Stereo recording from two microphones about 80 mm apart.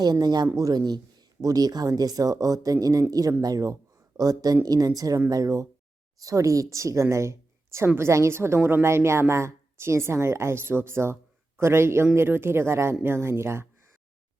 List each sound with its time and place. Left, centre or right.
0.0 s speech: right
0.5 s a woman's voice: right